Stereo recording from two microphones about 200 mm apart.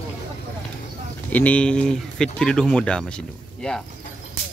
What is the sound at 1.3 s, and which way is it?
Speech, 5° left (ahead or behind).